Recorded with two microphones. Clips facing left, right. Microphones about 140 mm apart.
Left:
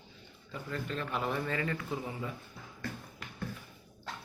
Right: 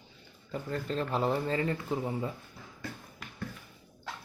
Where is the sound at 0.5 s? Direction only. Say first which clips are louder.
Right 5 dB; 35° right (ahead or behind).